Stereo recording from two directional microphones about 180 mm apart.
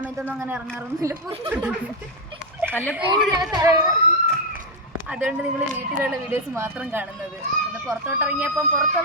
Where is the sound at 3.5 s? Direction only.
15° right (ahead or behind).